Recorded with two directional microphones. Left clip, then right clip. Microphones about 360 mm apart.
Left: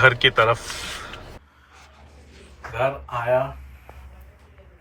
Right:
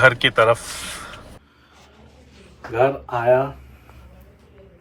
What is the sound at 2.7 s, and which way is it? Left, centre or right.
Speech, centre.